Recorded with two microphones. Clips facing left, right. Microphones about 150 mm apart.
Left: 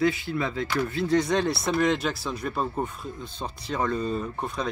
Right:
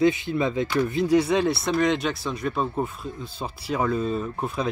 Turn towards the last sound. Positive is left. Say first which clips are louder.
# right 3 dB
turn(degrees=-5)  # may be behind; listen again after turning